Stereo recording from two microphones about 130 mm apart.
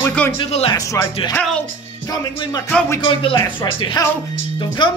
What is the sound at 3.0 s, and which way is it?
Speech, 45° left (ahead or behind).